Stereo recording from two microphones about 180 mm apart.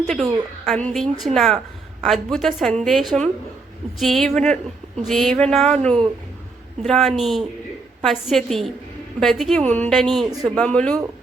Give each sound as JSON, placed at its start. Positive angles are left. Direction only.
{"t": 0.6, "sound": "a woman's voice", "side_deg": 0}